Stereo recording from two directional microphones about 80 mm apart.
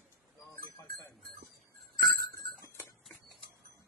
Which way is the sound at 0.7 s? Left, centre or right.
Left.